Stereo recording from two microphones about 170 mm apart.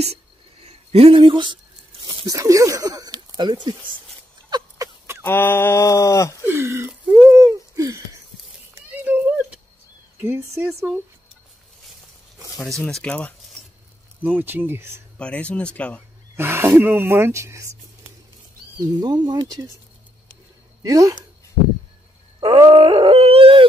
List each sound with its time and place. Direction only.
0.7 s speech: 35° right (ahead or behind)
4.5 s a sound: 20° right (ahead or behind)
5.2 s speech: 10° left (ahead or behind)
6.4 s speech: 15° right (ahead or behind)
8.7 s a sound: 10° right (ahead or behind)
10.2 s speech: 15° right (ahead or behind)
12.8 s speech: 5° left (ahead or behind)
14.2 s speech: 10° right (ahead or behind)
15.1 s speech: 5° left (ahead or behind)
16.3 s speech: 15° right (ahead or behind)
18.9 s speech: 25° right (ahead or behind)
20.8 s speech: 20° right (ahead or behind)
22.4 s groan: 30° right (ahead or behind)